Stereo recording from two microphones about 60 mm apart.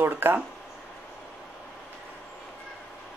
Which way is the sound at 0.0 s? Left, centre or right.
Right.